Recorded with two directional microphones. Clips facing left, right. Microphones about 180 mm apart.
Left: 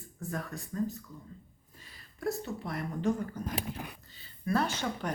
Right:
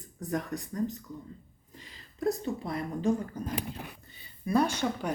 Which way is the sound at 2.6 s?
10° right (ahead or behind).